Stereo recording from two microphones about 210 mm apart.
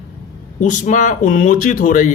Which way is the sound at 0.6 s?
35° left (ahead or behind).